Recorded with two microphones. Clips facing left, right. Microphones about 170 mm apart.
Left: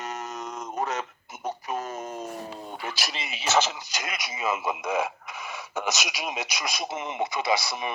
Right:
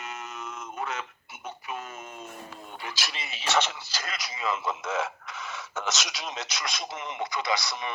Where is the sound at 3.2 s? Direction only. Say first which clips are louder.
Left 3 dB; 5° left (ahead or behind).